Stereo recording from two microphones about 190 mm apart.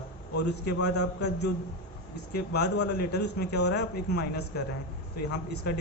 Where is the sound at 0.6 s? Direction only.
60° left (ahead or behind).